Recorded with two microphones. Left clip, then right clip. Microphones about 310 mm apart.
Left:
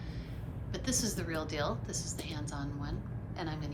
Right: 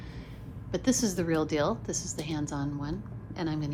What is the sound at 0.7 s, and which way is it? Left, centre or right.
A woman's voice, centre.